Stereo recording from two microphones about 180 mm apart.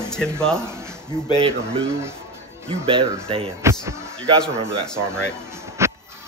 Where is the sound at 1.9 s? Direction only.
15° right (ahead or behind).